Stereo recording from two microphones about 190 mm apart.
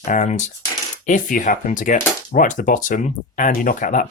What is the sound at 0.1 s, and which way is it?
Speech, 40° left (ahead or behind).